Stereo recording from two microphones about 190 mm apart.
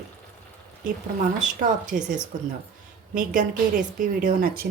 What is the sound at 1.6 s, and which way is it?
Speech, 40° right (ahead or behind).